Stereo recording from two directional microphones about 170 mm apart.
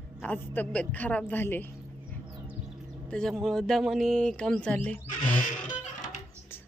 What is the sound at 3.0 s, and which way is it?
Speech, 5° left (ahead or behind).